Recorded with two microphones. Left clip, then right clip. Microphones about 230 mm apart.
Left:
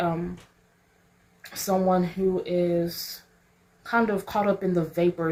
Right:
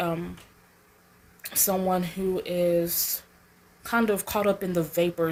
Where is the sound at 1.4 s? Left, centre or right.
Right.